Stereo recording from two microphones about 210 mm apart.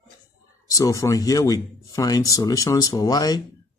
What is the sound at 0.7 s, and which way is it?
Speech, 15° left (ahead or behind).